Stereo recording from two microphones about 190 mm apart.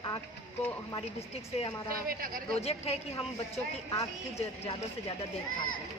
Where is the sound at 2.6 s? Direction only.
35° left (ahead or behind).